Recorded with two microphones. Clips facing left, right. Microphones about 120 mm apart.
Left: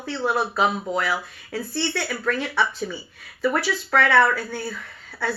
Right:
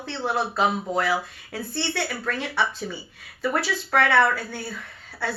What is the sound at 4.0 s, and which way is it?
Speech, 15° right (ahead or behind).